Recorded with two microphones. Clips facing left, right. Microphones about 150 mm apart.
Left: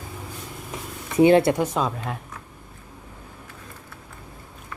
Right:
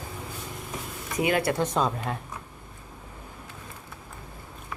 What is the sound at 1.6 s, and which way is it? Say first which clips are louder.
Speech: left 1 dB; centre (ahead or behind).